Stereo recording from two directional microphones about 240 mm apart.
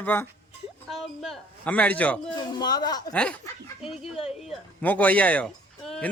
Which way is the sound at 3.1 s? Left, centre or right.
Centre.